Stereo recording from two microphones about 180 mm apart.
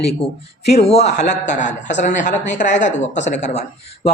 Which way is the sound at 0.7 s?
35° left (ahead or behind).